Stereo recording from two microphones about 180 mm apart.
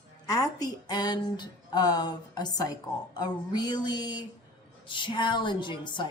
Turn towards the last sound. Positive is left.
turn(degrees=25)  # may be behind; listen again after turning